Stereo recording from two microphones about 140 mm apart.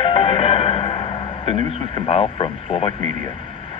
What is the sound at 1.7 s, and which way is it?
Speech, 45° left (ahead or behind).